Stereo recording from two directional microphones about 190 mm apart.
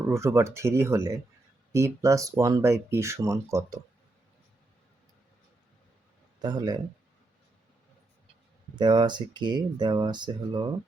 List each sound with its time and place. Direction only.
0.1 s speech: 15° right (ahead or behind)
6.4 s speech: 20° right (ahead or behind)
8.8 s speech: 25° right (ahead or behind)